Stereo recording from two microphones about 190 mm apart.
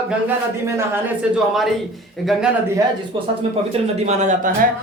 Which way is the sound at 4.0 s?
40° right (ahead or behind).